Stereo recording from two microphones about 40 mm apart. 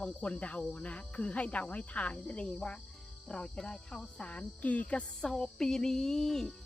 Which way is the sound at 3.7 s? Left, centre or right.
Left.